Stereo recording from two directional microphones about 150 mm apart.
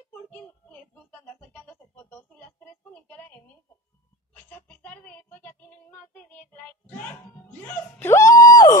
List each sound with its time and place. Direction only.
0.1 s music: 10° left (ahead or behind)
2.9 s a sound: 10° left (ahead or behind)
4.5 s music: 10° left (ahead or behind)